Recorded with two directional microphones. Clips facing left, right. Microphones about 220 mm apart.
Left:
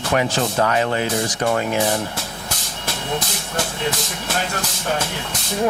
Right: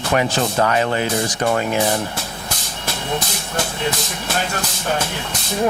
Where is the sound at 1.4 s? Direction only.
25° right (ahead or behind).